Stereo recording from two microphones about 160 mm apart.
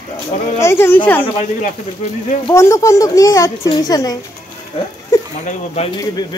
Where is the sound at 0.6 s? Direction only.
15° left (ahead or behind).